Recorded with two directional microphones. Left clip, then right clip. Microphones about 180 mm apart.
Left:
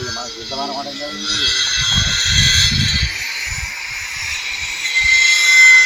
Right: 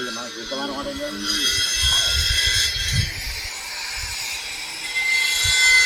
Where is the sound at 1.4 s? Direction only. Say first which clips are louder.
Left 5 dB; 30° right (ahead or behind).